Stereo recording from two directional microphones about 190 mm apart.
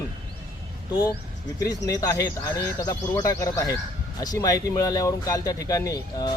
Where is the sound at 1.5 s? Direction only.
20° left (ahead or behind).